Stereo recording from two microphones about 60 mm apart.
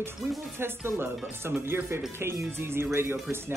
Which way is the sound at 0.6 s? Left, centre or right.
Right.